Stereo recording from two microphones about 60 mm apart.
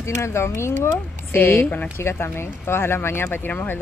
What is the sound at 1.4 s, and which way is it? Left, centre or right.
Speech, left.